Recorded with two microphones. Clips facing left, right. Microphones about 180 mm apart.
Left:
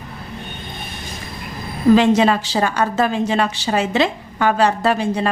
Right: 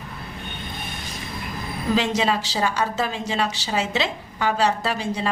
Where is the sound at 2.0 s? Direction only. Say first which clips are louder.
Left 7 dB; 55° left (ahead or behind).